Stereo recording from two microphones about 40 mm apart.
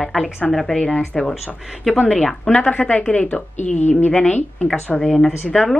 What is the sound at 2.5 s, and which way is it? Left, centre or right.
Speech, left.